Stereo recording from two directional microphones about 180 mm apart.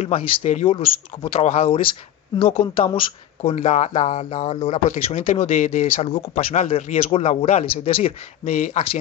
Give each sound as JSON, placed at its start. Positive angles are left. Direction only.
{"t": 0.0, "sound": "speech", "side_deg": 35}